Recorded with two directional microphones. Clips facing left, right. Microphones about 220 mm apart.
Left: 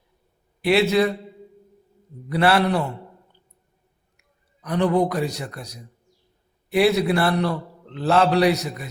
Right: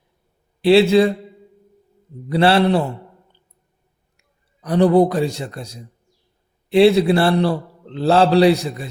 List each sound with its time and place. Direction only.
0.6 s a man's voice: 30° right (ahead or behind)
2.3 s a man's voice: 30° right (ahead or behind)
4.2 s a man's voice: 35° right (ahead or behind)